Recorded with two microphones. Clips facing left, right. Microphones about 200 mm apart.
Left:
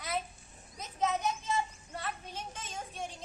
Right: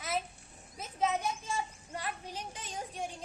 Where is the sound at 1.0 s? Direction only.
10° right (ahead or behind).